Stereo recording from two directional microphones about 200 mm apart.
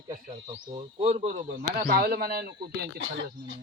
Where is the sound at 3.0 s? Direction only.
70° right (ahead or behind).